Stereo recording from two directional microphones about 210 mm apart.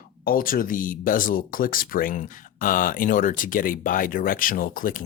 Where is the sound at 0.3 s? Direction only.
45° left (ahead or behind).